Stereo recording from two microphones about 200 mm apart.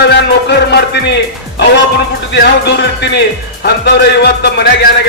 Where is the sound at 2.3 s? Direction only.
60° left (ahead or behind).